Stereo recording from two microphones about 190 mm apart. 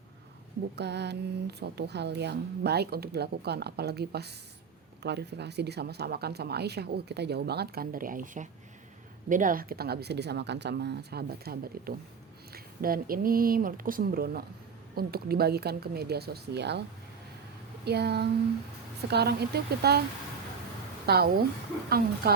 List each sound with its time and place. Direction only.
0.8 s speech: 60° right (ahead or behind)
17.8 s speech: 60° right (ahead or behind)
21.1 s speech: 55° right (ahead or behind)